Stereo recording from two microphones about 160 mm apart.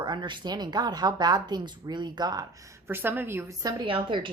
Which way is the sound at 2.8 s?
15° right (ahead or behind).